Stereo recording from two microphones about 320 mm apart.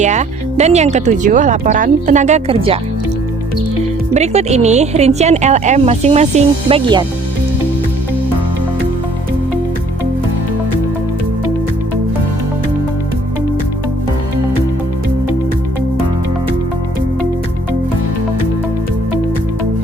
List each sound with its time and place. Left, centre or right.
0.0 s a woman's voice: right
4.1 s a woman's voice: centre